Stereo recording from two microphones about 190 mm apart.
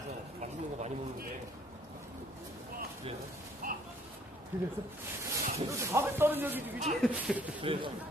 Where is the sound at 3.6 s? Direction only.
45° right (ahead or behind).